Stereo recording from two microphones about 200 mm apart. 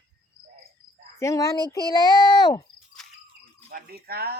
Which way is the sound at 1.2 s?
15° left (ahead or behind).